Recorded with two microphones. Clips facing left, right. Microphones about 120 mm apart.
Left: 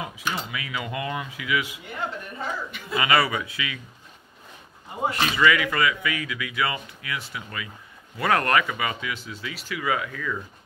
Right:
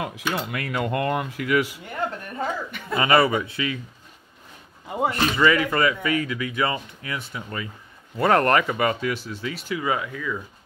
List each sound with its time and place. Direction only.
0.0 s a woman's voice: 60° right (ahead or behind)
3.0 s speech: 30° right (ahead or behind)
5.1 s speech: 35° right (ahead or behind)
9.7 s speech: 25° right (ahead or behind)